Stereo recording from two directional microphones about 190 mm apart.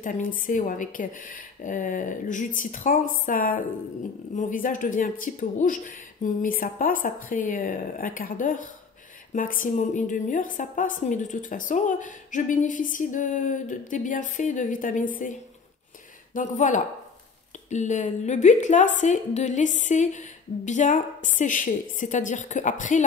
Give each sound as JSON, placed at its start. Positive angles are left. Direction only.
{"t": 0.0, "sound": "a woman's voice", "side_deg": 45}
{"t": 16.3, "sound": "a woman's voice", "side_deg": 40}